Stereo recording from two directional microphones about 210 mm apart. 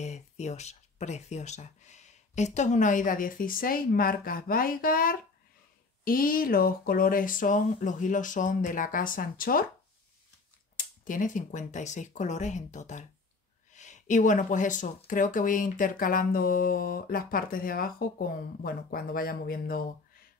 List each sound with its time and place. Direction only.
0.0 s speech: 35° left (ahead or behind)
11.1 s speech: 40° left (ahead or behind)